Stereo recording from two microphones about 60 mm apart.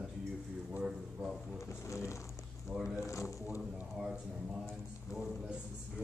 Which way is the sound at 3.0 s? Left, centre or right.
Left.